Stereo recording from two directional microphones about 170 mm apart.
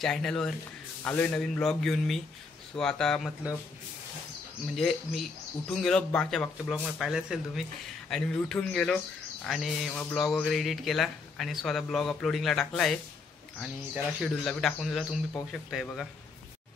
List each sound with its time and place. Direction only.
0.0 s a man's voice: 5° left (ahead or behind)
4.7 s a man's voice: centre (ahead or behind)
14.2 s a man's voice: centre (ahead or behind)